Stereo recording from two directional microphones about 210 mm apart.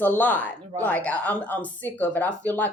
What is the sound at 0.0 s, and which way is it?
Speech, 10° left (ahead or behind).